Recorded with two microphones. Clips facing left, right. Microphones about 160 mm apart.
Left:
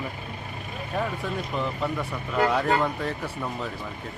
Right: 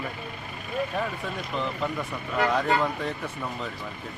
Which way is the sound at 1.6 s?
5° left (ahead or behind).